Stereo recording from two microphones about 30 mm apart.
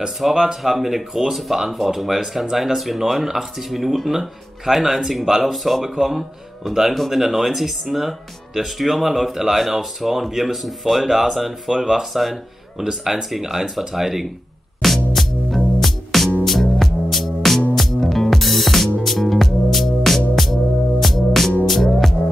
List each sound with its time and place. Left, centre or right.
0.3 s speech: centre
0.6 s speech: centre
12.7 s speech: centre
14.8 s music: centre